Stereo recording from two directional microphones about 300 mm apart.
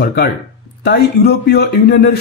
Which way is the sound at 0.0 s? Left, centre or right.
Left.